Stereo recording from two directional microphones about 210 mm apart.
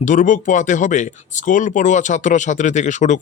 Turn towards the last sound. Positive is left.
turn(degrees=35)  # may be behind; listen again after turning